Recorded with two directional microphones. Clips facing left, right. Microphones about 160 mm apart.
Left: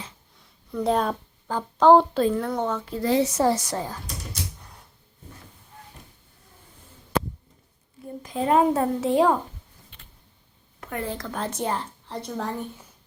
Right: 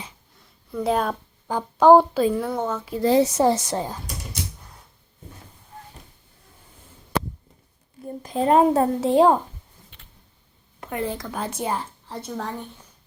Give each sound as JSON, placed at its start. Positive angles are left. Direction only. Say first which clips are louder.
{"t": 0.4, "sound": "a sound", "louder": "even", "side_deg": -5}
{"t": 1.5, "sound": "speech", "louder": "right 2 dB", "side_deg": -10}
{"t": 3.0, "sound": "a child's voice", "louder": "right 4 dB", "side_deg": -35}
{"t": 3.3, "sound": "speech", "louder": "right 2 dB", "side_deg": -25}
{"t": 8.2, "sound": "a child's voice", "louder": "right 3 dB", "side_deg": -35}
{"t": 10.8, "sound": "a woman's voice", "louder": "right 3 dB", "side_deg": -20}